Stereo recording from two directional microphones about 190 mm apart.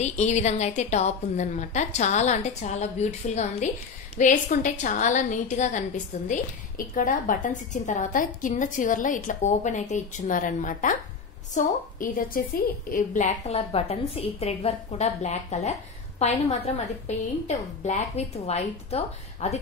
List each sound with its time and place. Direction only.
0.0 s a woman's voice: 35° left (ahead or behind)